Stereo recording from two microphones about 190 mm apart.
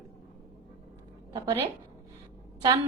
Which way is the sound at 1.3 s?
20° right (ahead or behind).